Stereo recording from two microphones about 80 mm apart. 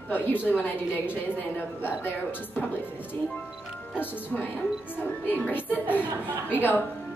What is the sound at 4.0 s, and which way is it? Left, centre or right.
A woman's voice, left.